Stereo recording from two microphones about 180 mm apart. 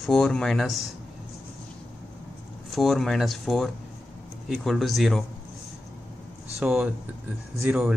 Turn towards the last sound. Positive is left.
turn(degrees=-10)  # may be behind; listen again after turning